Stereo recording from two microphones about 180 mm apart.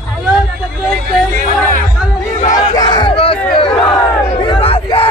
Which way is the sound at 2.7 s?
20° left (ahead or behind).